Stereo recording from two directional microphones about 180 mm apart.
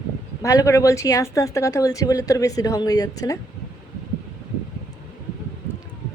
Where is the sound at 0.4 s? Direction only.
15° left (ahead or behind).